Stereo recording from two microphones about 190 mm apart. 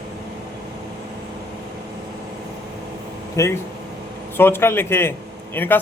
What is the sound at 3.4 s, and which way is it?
Speech, 15° left (ahead or behind).